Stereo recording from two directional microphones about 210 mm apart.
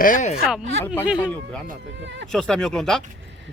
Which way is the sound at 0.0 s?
40° left (ahead or behind).